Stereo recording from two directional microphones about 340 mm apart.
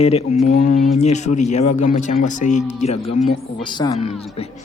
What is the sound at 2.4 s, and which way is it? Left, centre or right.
Speech, left.